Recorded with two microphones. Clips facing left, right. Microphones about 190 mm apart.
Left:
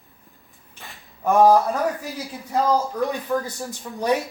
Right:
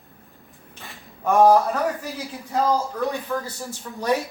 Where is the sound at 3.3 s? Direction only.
15° left (ahead or behind).